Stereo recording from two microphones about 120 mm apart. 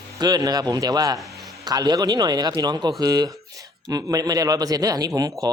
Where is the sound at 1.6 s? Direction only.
35° right (ahead or behind).